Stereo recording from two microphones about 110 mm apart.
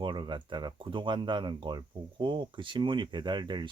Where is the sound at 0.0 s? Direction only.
45° right (ahead or behind).